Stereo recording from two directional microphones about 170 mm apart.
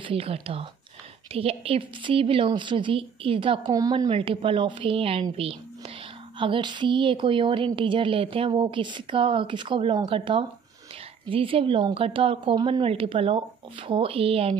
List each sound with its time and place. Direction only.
0.0 s a woman's voice: 35° right (ahead or behind)